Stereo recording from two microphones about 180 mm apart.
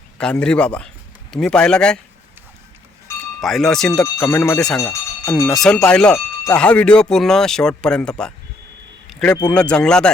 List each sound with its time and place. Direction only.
0.2 s speech: 5° left (ahead or behind)
3.4 s speech: centre (ahead or behind)
4.8 s a sound: 15° left (ahead or behind)
5.5 s speech: centre (ahead or behind)
9.0 s vehicle: 5° left (ahead or behind)
9.5 s speech: 5° left (ahead or behind)